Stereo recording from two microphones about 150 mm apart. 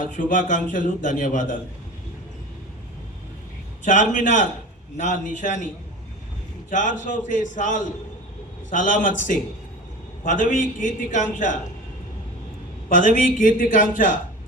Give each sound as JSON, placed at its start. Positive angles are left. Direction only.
{"t": 0.1, "sound": "a man's voice", "side_deg": 60}
{"t": 3.8, "sound": "a man's voice", "side_deg": 55}
{"t": 6.7, "sound": "a man's voice", "side_deg": 55}
{"t": 12.9, "sound": "a man's voice", "side_deg": 55}